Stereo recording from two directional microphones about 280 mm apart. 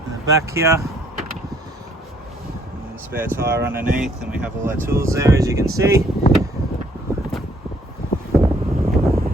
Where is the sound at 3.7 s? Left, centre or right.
Right.